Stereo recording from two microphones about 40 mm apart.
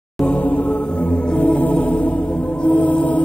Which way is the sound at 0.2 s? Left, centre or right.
Left.